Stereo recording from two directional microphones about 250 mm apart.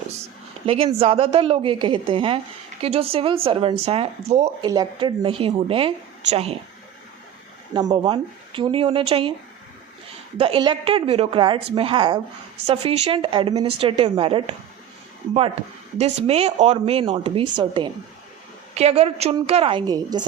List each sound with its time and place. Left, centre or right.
0.6 s speech: right
7.9 s speech: centre
10.3 s speech: right
16.0 s speech: right